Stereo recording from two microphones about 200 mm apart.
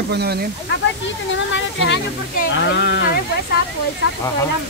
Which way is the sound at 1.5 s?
65° left (ahead or behind).